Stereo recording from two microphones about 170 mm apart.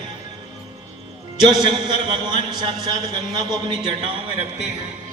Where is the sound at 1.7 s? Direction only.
25° right (ahead or behind).